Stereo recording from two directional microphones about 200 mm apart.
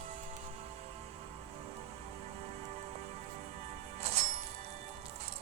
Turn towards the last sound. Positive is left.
turn(degrees=-30)  # may be behind; listen again after turning